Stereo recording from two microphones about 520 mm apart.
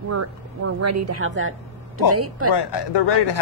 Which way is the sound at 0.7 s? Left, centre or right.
Right.